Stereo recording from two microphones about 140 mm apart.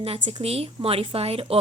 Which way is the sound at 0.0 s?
45° right (ahead or behind).